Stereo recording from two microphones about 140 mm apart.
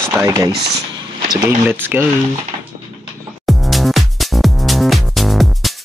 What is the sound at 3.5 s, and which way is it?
Music, centre (ahead or behind).